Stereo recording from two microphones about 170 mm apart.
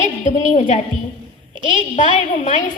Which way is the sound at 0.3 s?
45° left (ahead or behind).